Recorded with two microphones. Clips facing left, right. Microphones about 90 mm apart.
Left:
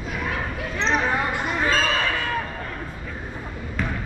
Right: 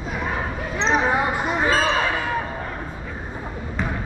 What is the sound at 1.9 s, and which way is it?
Basketball bounce, 15° right (ahead or behind).